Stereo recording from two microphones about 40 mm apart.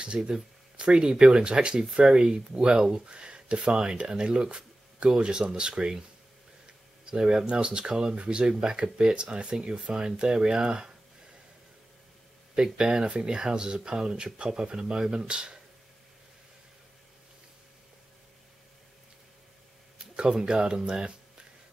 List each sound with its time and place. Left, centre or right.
0.0 s speech: right
6.6 s tick-tock: right
7.4 s speech: right
12.7 s speech: centre
20.0 s speech: centre